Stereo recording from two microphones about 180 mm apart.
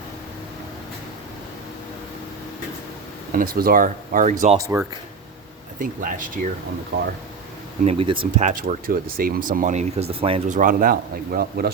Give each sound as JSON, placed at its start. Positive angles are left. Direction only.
{"t": 3.3, "sound": "speech", "side_deg": -55}
{"t": 5.8, "sound": "speech", "side_deg": -50}
{"t": 6.9, "sound": "speech", "side_deg": -65}
{"t": 7.9, "sound": "speech", "side_deg": -30}
{"t": 8.4, "sound": "speech", "side_deg": -40}
{"t": 10.6, "sound": "speech", "side_deg": -50}